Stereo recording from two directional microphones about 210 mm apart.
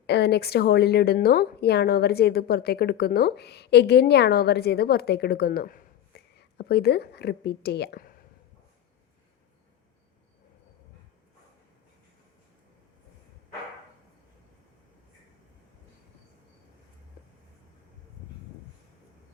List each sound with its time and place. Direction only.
0.1 s a woman's voice: 50° left (ahead or behind)